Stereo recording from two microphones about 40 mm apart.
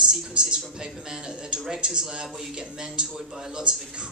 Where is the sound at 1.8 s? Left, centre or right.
Right.